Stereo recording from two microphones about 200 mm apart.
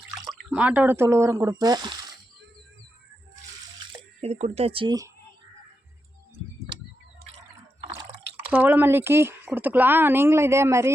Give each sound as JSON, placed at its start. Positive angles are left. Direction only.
{"t": 0.3, "sound": "speech", "side_deg": -5}
{"t": 3.8, "sound": "speech", "side_deg": -30}
{"t": 7.8, "sound": "drip", "side_deg": -30}
{"t": 8.5, "sound": "speech", "side_deg": -10}